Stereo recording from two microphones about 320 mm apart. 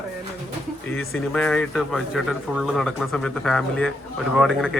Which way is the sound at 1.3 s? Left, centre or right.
Centre.